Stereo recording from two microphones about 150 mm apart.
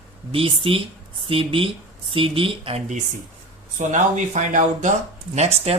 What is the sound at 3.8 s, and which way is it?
Speech, 55° right (ahead or behind).